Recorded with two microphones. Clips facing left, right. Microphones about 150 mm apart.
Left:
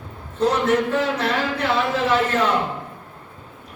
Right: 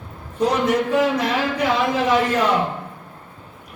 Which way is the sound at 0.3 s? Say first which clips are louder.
Even; 10° right (ahead or behind).